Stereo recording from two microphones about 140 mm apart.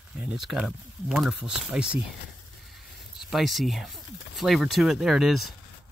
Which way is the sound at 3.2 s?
Centre (ahead or behind).